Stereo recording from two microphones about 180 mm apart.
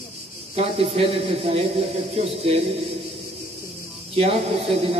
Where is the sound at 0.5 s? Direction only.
35° right (ahead or behind).